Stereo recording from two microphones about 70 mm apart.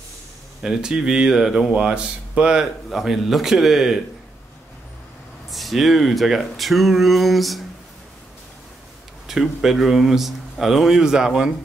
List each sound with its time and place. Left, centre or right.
0.6 s speech: centre
2.9 s speech: centre
5.5 s speech: centre
9.3 s speech: centre